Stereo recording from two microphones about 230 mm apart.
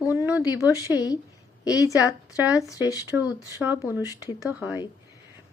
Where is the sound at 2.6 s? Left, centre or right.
Centre.